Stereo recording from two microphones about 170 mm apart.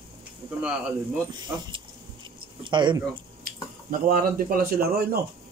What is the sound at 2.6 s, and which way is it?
Speech, 25° right (ahead or behind).